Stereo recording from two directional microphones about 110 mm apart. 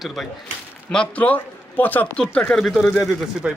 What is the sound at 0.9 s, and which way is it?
Speech, 10° left (ahead or behind).